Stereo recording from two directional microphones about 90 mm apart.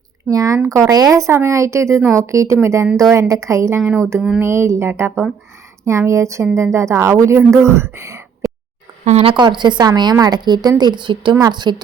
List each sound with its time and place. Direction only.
0.3 s speech: 40° right (ahead or behind)
9.2 s a woman's voice: 60° right (ahead or behind)
11.3 s a woman's voice: 50° right (ahead or behind)